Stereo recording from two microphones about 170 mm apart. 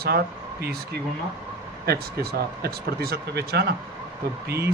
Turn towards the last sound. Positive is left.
turn(degrees=-70)  # may be behind; listen again after turning